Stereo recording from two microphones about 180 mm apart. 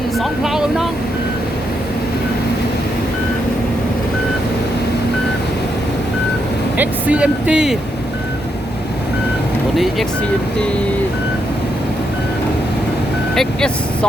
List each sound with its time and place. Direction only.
0.2 s speech: centre (ahead or behind)
6.7 s speech: 5° right (ahead or behind)
9.7 s speech: centre (ahead or behind)
13.3 s speech: 5° left (ahead or behind)